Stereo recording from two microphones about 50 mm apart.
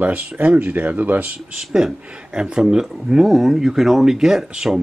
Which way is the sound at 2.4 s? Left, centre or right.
Centre.